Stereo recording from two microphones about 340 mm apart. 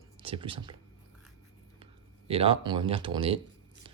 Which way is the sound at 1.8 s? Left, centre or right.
Centre.